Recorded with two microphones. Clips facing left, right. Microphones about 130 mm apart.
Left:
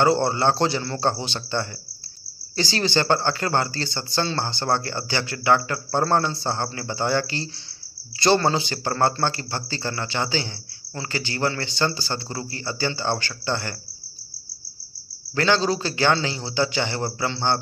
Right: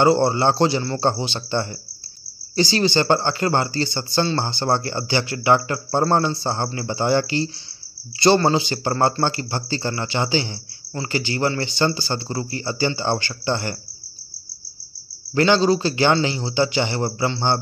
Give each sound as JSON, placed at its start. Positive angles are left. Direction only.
{"t": 0.0, "sound": "a man's voice", "side_deg": -10}
{"t": 15.3, "sound": "a man's voice", "side_deg": -15}